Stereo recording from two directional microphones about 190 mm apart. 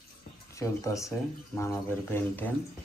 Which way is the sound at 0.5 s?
15° left (ahead or behind).